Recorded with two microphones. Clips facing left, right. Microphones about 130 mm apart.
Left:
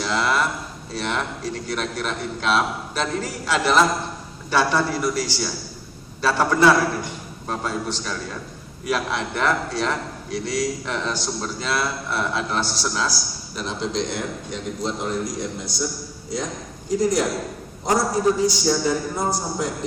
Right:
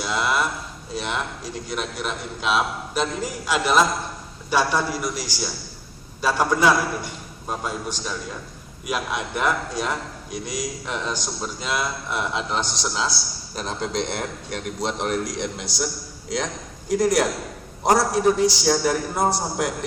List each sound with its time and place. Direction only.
0.0 s a sound: 10° right (ahead or behind)
0.9 s a man's voice: 10° right (ahead or behind)
13.6 s a man's voice: 50° right (ahead or behind); by 16.5 s 90° right
16.9 s a man's voice: 70° right (ahead or behind)